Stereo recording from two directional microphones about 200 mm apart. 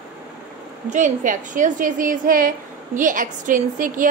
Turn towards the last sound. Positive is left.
turn(degrees=-40)  # may be behind; listen again after turning